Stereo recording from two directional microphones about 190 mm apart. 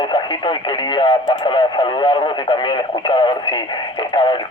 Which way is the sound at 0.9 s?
25° left (ahead or behind).